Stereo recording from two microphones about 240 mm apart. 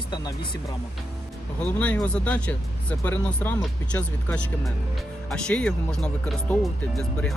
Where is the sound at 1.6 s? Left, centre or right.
Centre.